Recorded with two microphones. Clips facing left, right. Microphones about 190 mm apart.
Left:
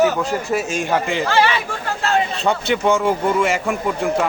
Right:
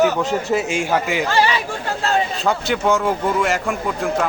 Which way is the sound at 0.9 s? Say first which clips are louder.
Even; 5° right (ahead or behind).